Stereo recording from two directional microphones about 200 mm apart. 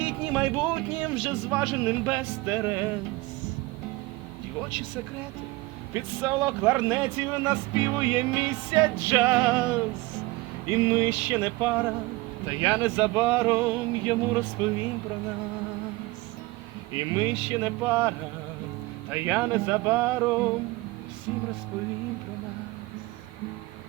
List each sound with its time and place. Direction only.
0.0 s music: 10° right (ahead or behind)
1.0 s speech: 10° right (ahead or behind)
5.9 s speech: 15° right (ahead or behind)
16.9 s speech: 15° right (ahead or behind)
19.1 s speech: 10° right (ahead or behind)